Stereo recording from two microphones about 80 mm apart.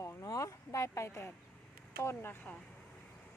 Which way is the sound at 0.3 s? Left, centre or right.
Left.